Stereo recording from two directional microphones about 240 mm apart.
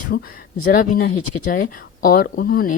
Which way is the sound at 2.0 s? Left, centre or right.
Left.